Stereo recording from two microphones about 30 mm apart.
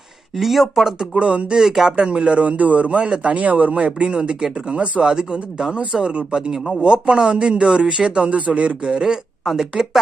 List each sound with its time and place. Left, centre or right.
0.4 s speech: centre
1.1 s speech: right
1.6 s speech: centre
2.0 s speech: right
2.4 s a man's voice: right
3.3 s speech: right
3.8 s speech: right
4.2 s speech: right
4.6 s speech: right
5.0 s speech: right